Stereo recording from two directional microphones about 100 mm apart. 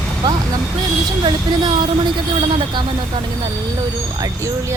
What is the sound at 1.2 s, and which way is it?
Speech, 45° right (ahead or behind).